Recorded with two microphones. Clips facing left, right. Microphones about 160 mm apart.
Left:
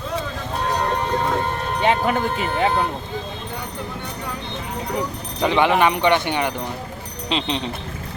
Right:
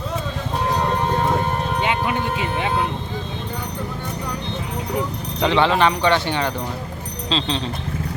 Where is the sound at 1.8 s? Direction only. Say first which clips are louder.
Left 5 dB; 40° left (ahead or behind).